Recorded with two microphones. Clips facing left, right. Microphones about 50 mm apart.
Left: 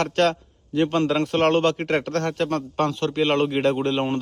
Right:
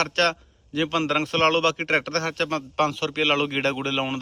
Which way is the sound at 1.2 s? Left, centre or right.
Right.